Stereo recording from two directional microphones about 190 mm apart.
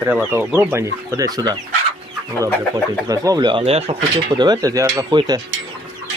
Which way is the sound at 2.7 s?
20° right (ahead or behind).